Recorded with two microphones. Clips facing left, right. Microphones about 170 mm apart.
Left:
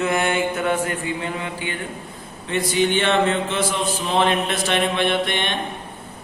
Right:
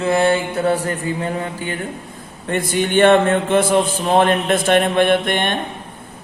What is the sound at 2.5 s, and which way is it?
Mantra, 50° right (ahead or behind).